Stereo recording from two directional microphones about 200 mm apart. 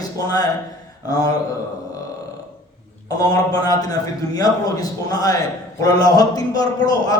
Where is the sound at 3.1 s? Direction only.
20° left (ahead or behind).